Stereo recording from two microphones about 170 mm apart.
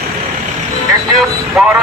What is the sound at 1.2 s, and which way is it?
Speech, 10° right (ahead or behind).